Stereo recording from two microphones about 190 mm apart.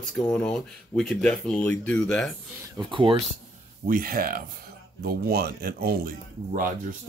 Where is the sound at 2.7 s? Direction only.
25° right (ahead or behind).